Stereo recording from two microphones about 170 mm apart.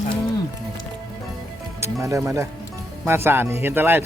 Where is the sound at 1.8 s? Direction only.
20° right (ahead or behind).